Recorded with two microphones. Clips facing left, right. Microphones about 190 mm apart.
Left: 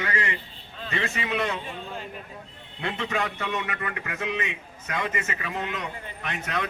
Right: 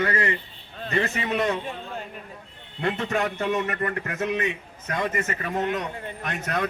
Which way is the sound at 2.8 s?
45° right (ahead or behind).